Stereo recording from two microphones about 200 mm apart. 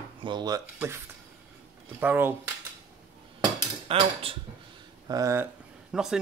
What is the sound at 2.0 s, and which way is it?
Speech, 10° right (ahead or behind).